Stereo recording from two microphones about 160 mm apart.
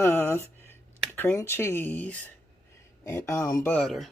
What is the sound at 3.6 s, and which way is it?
Speech, 5° left (ahead or behind).